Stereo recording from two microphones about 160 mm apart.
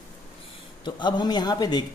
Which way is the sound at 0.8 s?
30° left (ahead or behind).